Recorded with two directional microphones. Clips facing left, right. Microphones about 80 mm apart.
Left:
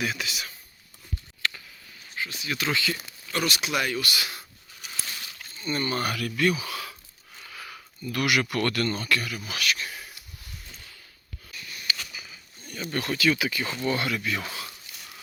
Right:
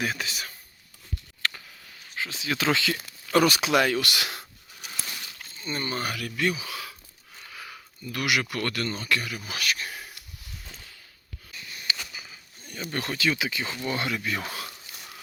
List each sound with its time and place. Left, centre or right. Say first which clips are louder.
0.0 s speech: even; right
1.4 s a sound: even; right
2.1 s speech: right 2 dB; right
5.5 s speech: left 3 dB; right
9.1 s speech: left 1 dB; right
11.5 s a sound: even; right
12.9 s speech: left 3 dB; right
14.3 s speech: even; right